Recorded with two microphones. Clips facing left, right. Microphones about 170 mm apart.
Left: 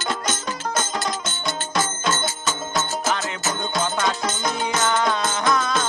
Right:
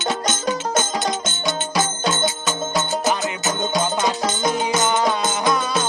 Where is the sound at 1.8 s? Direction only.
Centre (ahead or behind).